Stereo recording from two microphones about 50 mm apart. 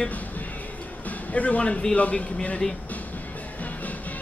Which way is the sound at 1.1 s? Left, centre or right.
Left.